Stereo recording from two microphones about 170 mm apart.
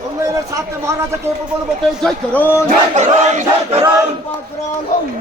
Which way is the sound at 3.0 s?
45° right (ahead or behind).